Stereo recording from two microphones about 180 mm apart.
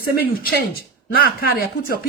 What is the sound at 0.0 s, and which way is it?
Speech, 55° left (ahead or behind).